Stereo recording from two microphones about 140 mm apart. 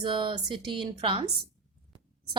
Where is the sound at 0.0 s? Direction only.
35° right (ahead or behind).